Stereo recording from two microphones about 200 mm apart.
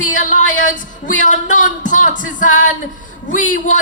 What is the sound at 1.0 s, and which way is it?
Speech, 40° left (ahead or behind).